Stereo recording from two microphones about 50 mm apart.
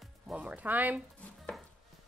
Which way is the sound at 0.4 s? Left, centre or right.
Right.